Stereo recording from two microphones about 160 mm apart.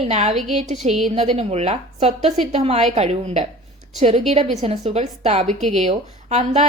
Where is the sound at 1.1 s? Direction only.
40° right (ahead or behind).